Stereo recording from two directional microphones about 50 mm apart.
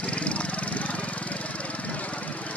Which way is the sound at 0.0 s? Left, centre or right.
Left.